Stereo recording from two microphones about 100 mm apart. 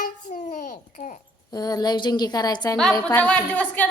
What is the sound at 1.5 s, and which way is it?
A woman's voice, 40° left (ahead or behind).